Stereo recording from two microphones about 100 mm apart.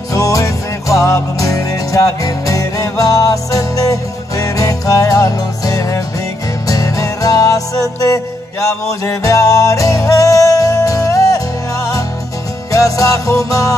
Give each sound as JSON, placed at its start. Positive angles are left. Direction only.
{"t": 0.1, "sound": "music", "side_deg": 35}